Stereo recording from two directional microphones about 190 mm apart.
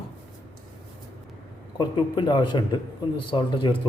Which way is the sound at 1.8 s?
25° left (ahead or behind).